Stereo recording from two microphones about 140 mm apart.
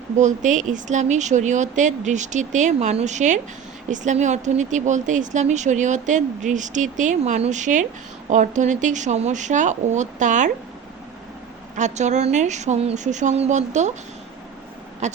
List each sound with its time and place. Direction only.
0.2 s speech: 65° right (ahead or behind)
11.8 s speech: 55° right (ahead or behind)
15.0 s speech: 55° right (ahead or behind)